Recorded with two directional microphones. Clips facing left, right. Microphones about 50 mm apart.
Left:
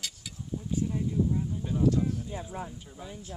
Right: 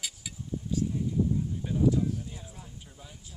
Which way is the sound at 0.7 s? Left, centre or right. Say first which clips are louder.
Even; left.